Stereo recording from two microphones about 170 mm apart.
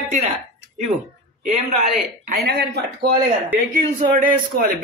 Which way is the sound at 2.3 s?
70° right (ahead or behind).